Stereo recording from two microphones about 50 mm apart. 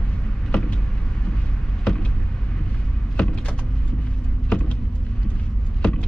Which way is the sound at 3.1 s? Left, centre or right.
Left.